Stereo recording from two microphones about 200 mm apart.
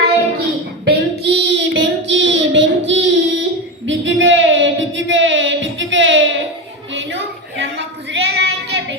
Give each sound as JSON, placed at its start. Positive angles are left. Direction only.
{"t": 0.9, "sound": "child singing", "side_deg": -60}
{"t": 3.8, "sound": "a sound", "side_deg": -70}
{"t": 8.1, "sound": "child singing", "side_deg": -55}